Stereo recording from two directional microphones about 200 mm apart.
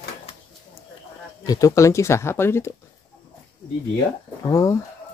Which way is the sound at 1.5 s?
15° left (ahead or behind).